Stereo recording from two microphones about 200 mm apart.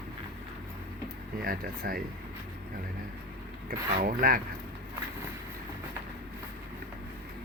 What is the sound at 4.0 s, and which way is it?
Speech, 45° right (ahead or behind).